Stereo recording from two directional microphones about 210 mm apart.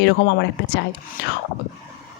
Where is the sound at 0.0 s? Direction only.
55° left (ahead or behind).